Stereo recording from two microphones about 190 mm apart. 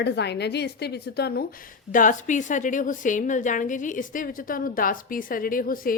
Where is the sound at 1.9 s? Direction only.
45° left (ahead or behind).